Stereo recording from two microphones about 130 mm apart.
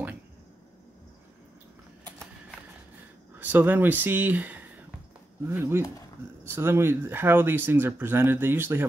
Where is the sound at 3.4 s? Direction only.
15° right (ahead or behind).